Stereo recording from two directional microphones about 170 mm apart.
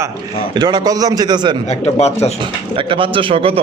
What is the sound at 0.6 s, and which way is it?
Speech, 25° right (ahead or behind).